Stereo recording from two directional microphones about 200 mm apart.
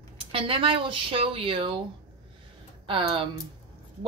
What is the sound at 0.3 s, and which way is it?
A woman's voice, 25° right (ahead or behind).